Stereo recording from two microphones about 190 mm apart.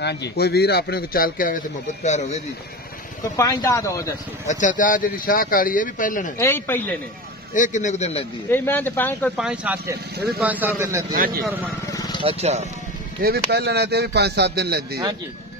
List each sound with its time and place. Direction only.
0.0 s a man's voice: 60° left (ahead or behind)
2.0 s a man's voice: 35° left (ahead or behind)
3.3 s speech: 20° left (ahead or behind)
4.5 s speech: 40° left (ahead or behind)
6.3 s speech: 10° left (ahead or behind)
7.5 s a man's voice: 40° left (ahead or behind)
8.5 s speech: 10° left (ahead or behind)
9.4 s a man's voice: 5° right (ahead or behind)
11.1 s speech: 50° right (ahead or behind)
11.6 s vehicle: 20° left (ahead or behind)
12.2 s speech: 30° right (ahead or behind)
13.2 s speech: 55° right (ahead or behind)